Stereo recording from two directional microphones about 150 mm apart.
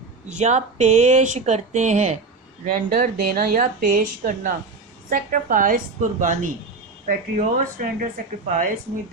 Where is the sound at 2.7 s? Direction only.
70° right (ahead or behind).